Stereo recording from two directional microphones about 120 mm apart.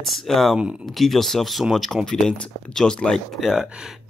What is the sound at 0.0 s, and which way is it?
Speech, centre (ahead or behind).